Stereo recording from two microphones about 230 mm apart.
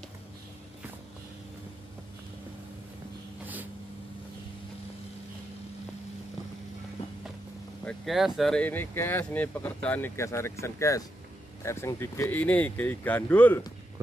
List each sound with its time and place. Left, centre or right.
7.8 s speech: centre